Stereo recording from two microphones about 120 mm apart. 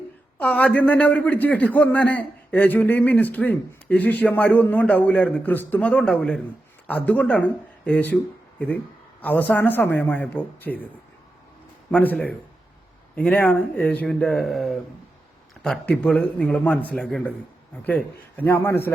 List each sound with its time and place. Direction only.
0.3 s a man's voice: 10° left (ahead or behind)
11.9 s a man's voice: 10° left (ahead or behind)